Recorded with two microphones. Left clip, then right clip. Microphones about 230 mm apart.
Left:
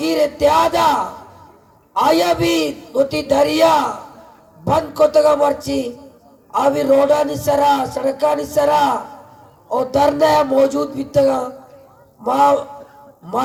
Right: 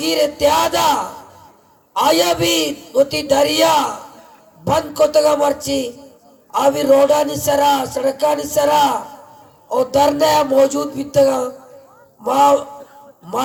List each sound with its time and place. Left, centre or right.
0.0 s a man's voice: right